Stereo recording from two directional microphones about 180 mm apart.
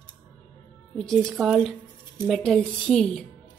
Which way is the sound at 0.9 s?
5° left (ahead or behind).